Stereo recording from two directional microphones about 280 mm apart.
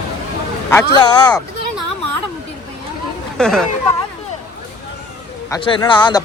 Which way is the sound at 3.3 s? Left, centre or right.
Centre.